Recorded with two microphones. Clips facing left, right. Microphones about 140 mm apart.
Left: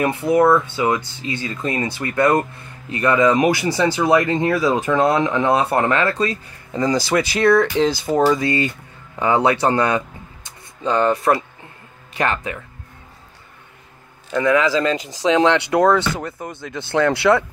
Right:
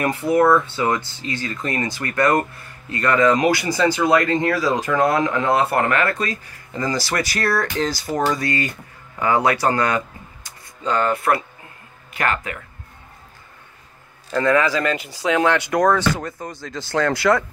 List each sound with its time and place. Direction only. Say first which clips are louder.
0.0 s speech: left 1 dB; 20° left (ahead or behind)
14.3 s speech: left 1 dB; 15° left (ahead or behind)
16.1 s speech: right 2 dB; 5° left (ahead or behind)
16.7 s speech: left 3 dB; 20° left (ahead or behind)